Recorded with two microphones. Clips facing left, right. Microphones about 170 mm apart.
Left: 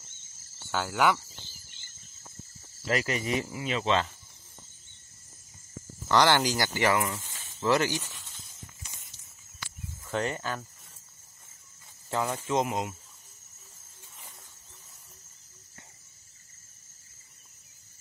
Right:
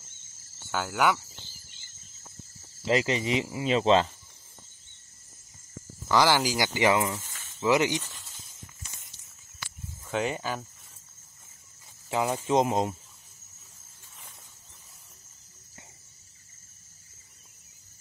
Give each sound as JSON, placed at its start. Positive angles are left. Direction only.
{"t": 0.7, "sound": "speech", "side_deg": 0}
{"t": 2.8, "sound": "speech", "side_deg": -25}
{"t": 3.6, "sound": "speech", "side_deg": -30}
{"t": 6.0, "sound": "speech", "side_deg": -5}
{"t": 7.2, "sound": "snake", "side_deg": 20}
{"t": 7.6, "sound": "speech", "side_deg": -15}
{"t": 10.0, "sound": "speech", "side_deg": -5}
{"t": 12.1, "sound": "speech", "side_deg": -15}